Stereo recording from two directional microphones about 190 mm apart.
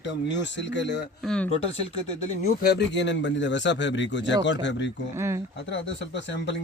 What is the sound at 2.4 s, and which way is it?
Speech, 55° left (ahead or behind).